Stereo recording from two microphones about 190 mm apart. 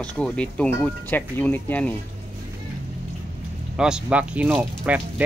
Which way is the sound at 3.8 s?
5° right (ahead or behind).